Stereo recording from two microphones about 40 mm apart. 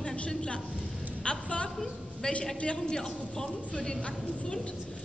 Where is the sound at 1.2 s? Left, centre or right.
Left.